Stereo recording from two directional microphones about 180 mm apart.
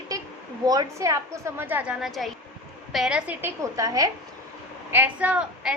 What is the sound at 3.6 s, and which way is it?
A woman's voice, 20° right (ahead or behind).